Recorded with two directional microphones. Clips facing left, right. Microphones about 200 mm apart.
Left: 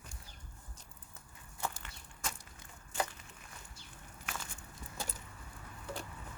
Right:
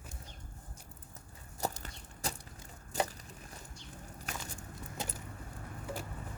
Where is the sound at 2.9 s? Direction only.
40° right (ahead or behind).